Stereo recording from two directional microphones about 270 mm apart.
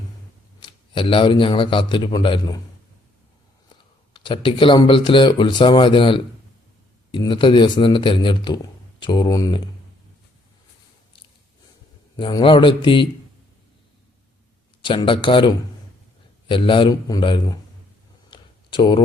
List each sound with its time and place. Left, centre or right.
0.6 s a man's voice: centre
4.1 s speech: centre
12.1 s speech: centre
14.8 s a man's voice: centre
18.3 s a sound: centre